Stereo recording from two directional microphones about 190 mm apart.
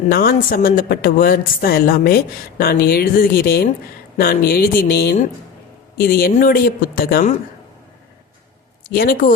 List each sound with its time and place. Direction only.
0.1 s speech: 50° left (ahead or behind)
8.9 s speech: 50° left (ahead or behind)